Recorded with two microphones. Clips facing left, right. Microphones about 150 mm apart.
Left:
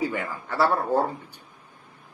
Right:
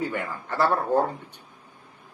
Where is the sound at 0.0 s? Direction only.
5° left (ahead or behind).